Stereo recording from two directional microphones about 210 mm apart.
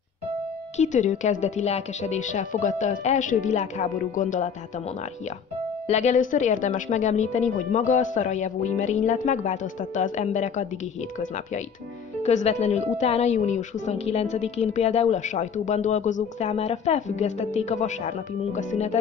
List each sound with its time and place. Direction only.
0.7 s a woman's voice: 35° left (ahead or behind)
5.9 s a woman's voice: 35° left (ahead or behind)
12.2 s a woman's voice: 30° left (ahead or behind)